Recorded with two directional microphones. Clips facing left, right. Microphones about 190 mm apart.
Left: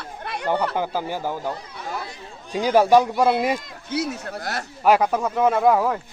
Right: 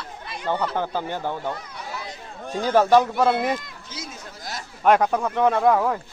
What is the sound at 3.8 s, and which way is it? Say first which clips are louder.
Speech: left 12 dB; 65° left (ahead or behind).